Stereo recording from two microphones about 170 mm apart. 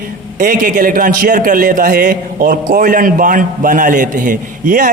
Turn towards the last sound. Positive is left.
turn(degrees=-50)  # may be behind; listen again after turning